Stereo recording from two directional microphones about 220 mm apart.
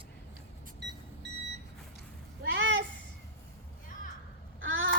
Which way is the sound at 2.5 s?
60° right (ahead or behind).